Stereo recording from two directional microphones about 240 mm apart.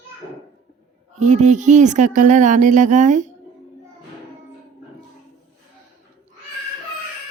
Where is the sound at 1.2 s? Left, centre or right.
Right.